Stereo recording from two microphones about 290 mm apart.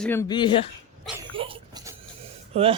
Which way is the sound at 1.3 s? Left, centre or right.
Centre.